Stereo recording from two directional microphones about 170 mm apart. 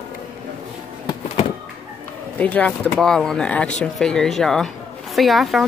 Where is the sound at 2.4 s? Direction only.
10° left (ahead or behind).